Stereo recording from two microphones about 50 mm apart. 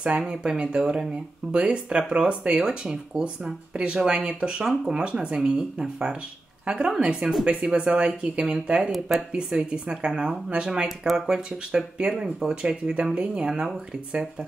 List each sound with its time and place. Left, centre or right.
0.3 s speech: centre
9.3 s speech: centre
12.6 s speech: centre